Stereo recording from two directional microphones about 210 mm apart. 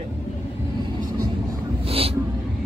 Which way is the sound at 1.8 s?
30° right (ahead or behind).